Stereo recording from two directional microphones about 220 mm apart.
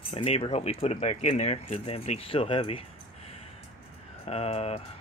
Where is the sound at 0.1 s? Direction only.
25° left (ahead or behind).